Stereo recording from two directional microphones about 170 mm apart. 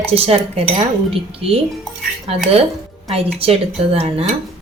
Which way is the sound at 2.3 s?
35° right (ahead or behind).